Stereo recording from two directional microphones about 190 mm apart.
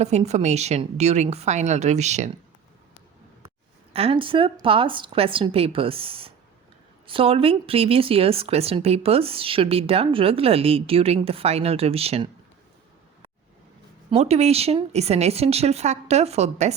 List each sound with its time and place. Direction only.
0.3 s speech: 35° right (ahead or behind)
3.9 s a woman's voice: 30° right (ahead or behind)
14.1 s speech: 35° right (ahead or behind)